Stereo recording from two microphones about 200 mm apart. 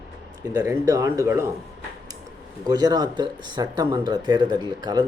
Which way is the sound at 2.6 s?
20° right (ahead or behind).